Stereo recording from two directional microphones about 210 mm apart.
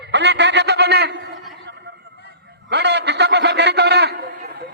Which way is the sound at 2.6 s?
55° right (ahead or behind).